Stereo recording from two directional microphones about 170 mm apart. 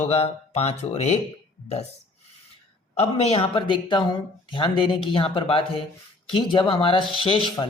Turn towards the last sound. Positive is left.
turn(degrees=30)  # may be behind; listen again after turning